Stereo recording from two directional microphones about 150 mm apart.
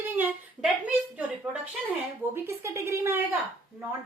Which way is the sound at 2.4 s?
20° right (ahead or behind).